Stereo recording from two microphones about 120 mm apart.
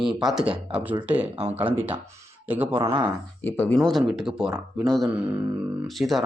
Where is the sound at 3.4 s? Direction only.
15° left (ahead or behind).